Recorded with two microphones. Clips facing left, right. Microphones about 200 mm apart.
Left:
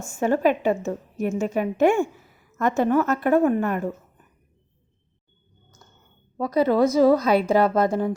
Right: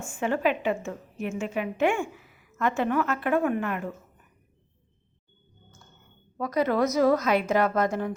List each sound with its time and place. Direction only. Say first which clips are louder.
0.0 s a woman's voice: left 5 dB; 40° left (ahead or behind)
6.3 s a woman's voice: left 5 dB; 30° left (ahead or behind)